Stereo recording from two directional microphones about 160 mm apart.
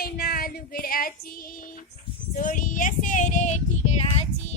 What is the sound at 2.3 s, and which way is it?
Child singing, 55° left (ahead or behind).